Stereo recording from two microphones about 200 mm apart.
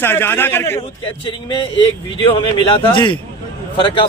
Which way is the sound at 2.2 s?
25° left (ahead or behind).